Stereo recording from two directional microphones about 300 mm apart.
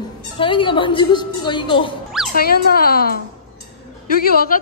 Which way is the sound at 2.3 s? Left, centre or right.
Left.